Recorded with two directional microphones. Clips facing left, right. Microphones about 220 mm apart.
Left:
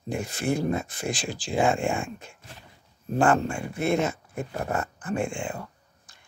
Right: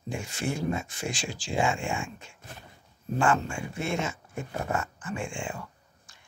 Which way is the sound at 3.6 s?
55° left (ahead or behind).